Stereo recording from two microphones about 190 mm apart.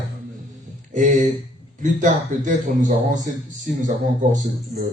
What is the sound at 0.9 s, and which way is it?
Speech, 40° right (ahead or behind).